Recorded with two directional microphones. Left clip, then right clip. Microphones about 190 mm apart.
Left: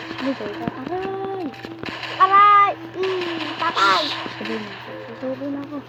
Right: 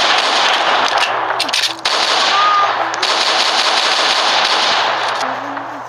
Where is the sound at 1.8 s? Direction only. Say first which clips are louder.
Right 3 dB; 65° right (ahead or behind).